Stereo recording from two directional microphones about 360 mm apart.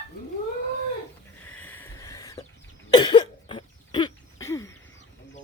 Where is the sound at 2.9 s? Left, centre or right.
Centre.